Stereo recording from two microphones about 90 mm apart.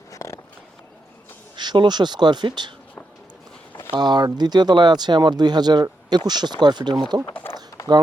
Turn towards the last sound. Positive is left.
turn(degrees=35)  # may be behind; listen again after turning